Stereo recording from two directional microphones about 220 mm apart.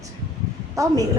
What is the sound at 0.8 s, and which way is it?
Speech, 15° right (ahead or behind).